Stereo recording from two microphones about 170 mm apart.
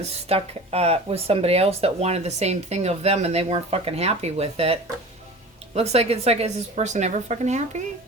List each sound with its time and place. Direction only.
0.3 s speech: 35° right (ahead or behind)